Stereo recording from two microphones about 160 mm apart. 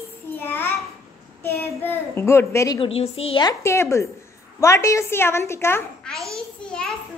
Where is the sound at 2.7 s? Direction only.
35° left (ahead or behind); by 5.8 s 15° left (ahead or behind).